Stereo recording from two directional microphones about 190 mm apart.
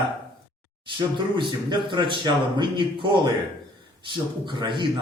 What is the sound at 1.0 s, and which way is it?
A man's voice, 25° right (ahead or behind).